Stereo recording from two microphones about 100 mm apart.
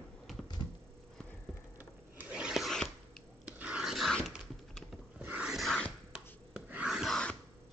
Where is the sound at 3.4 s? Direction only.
10° right (ahead or behind).